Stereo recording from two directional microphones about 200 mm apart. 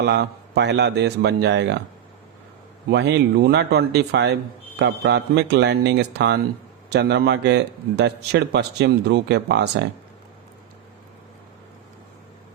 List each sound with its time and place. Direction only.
0.0 s a man's voice: 55° right (ahead or behind)
2.9 s a man's voice: 60° right (ahead or behind)